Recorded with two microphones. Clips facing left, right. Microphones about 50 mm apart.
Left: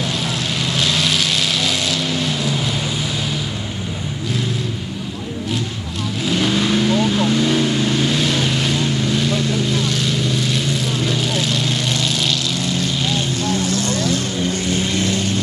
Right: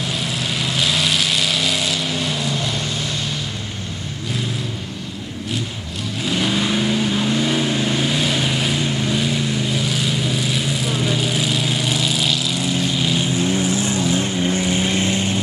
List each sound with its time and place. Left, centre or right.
0.7 s vehicle: centre
6.2 s vehicle: centre